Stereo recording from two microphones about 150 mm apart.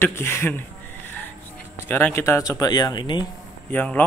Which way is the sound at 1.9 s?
15° left (ahead or behind).